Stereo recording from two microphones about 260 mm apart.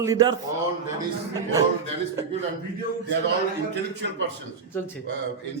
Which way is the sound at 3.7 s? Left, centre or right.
Right.